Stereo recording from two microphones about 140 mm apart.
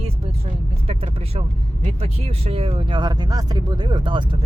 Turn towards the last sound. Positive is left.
turn(degrees=-35)  # may be behind; listen again after turning